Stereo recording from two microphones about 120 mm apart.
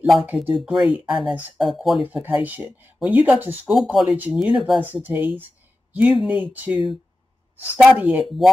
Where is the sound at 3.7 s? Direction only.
Centre (ahead or behind).